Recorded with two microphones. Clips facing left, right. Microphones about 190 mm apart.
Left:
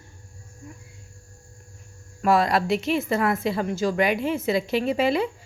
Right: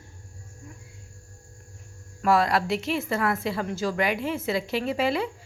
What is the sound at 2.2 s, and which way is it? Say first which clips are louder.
A woman's voice: left 2 dB; 20° left (ahead or behind).